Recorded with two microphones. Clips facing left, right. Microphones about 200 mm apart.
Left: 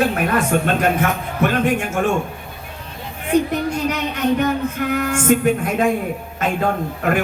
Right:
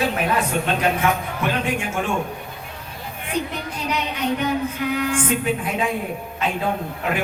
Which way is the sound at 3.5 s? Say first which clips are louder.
Left 6 dB; 45° left (ahead or behind).